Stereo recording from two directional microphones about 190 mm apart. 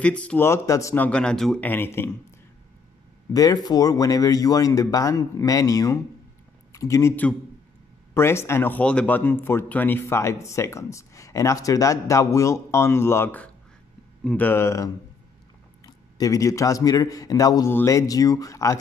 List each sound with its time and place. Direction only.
0.0 s a man's voice: 5° left (ahead or behind)
3.3 s a man's voice: 20° left (ahead or behind)